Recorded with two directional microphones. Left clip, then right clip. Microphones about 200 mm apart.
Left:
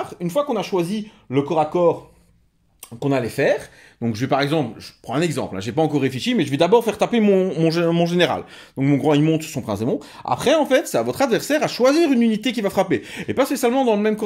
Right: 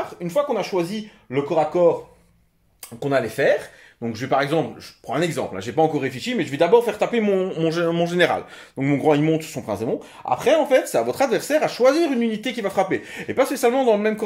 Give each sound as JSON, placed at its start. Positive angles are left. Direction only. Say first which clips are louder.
{"t": 0.2, "sound": "speech", "louder": "even", "side_deg": 50}
{"t": 3.0, "sound": "speech", "louder": "even", "side_deg": 40}